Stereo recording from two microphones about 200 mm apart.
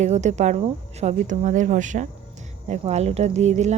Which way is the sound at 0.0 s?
35° right (ahead or behind).